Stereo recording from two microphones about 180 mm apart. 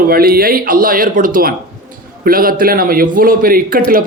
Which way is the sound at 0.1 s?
55° right (ahead or behind).